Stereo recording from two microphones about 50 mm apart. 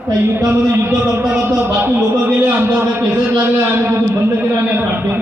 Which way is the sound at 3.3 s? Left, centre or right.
Right.